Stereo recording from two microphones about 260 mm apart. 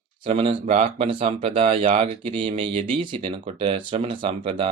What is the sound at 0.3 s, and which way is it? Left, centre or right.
Speech, right.